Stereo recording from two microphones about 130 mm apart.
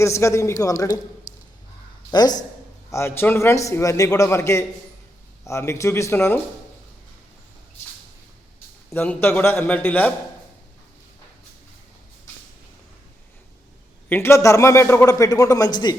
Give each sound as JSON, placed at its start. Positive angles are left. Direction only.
{"t": 0.0, "sound": "a man's voice", "side_deg": 20}
{"t": 2.9, "sound": "a man's voice", "side_deg": 20}
{"t": 8.9, "sound": "a man's voice", "side_deg": 15}
{"t": 14.1, "sound": "a man's voice", "side_deg": 20}